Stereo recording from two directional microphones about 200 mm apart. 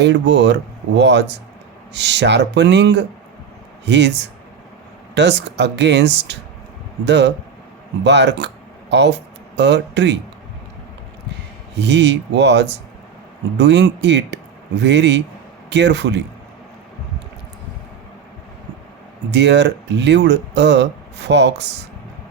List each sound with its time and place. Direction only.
0.0 s speech: 60° right (ahead or behind)
11.7 s speech: 60° right (ahead or behind)
19.3 s speech: 60° right (ahead or behind)